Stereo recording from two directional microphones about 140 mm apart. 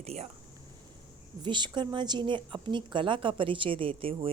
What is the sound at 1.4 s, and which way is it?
A woman's voice, 35° right (ahead or behind).